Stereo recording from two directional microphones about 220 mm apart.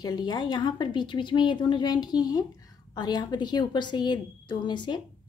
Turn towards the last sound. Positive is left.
turn(degrees=20)  # may be behind; listen again after turning